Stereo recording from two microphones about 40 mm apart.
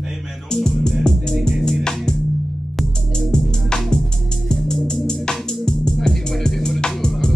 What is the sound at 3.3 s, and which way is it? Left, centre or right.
Music, centre.